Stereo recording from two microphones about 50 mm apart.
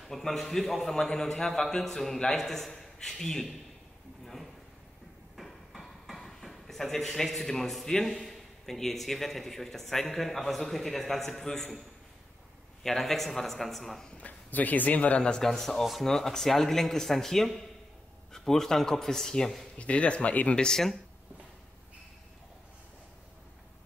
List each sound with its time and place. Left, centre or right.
0.0 s a man's voice: centre
5.3 s hammer: centre
6.1 s a man's voice: centre
12.8 s a man's voice: centre
14.1 s speech: left
15.2 s a man's voice: centre
19.8 s speech: left
20.6 s a man's voice: centre